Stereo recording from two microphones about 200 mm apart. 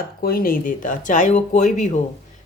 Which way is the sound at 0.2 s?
45° left (ahead or behind).